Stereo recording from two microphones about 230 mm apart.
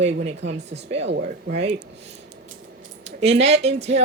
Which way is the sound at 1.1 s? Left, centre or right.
Right.